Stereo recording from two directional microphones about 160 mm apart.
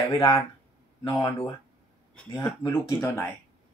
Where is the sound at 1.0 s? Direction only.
30° left (ahead or behind).